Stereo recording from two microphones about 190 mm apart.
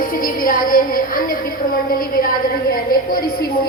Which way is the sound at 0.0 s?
45° left (ahead or behind).